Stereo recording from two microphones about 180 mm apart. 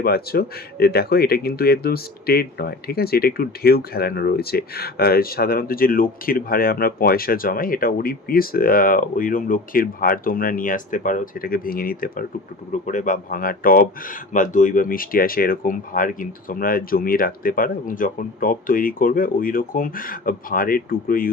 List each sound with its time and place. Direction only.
0.0 s speech: 60° left (ahead or behind)